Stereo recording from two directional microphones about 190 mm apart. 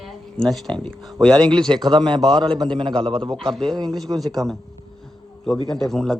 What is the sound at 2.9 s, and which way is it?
Speech, 5° left (ahead or behind).